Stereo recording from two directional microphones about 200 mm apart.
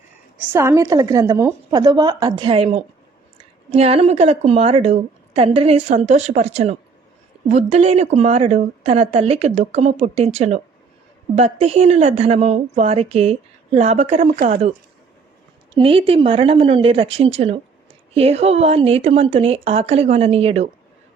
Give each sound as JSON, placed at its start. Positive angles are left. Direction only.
{"t": 0.3, "sound": "a woman's voice", "side_deg": -15}
{"t": 15.7, "sound": "a woman's voice", "side_deg": -25}